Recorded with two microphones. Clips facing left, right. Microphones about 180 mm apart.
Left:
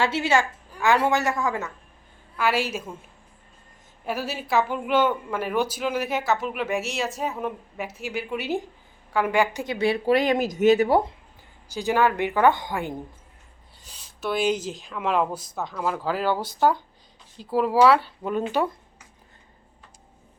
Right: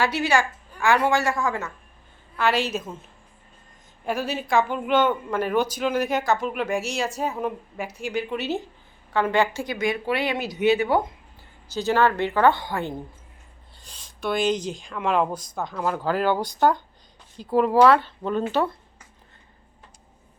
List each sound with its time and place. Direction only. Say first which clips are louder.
0.0 s a woman's voice: even; 25° left (ahead or behind)
2.3 s speech: right 1 dB; 5° left (ahead or behind)
4.0 s speech: right 3 dB; 5° left (ahead or behind)
9.7 s speech: left 5 dB; 35° left (ahead or behind)
11.7 s speech: right 1 dB; 15° left (ahead or behind)